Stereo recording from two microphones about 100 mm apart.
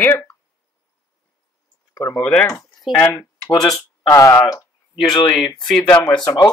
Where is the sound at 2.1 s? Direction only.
15° left (ahead or behind).